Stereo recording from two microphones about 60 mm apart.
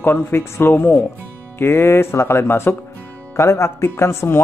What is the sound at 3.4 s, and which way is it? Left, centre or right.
A man's voice, left.